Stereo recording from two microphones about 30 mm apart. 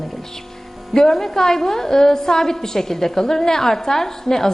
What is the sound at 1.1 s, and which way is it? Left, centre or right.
A woman's voice, centre.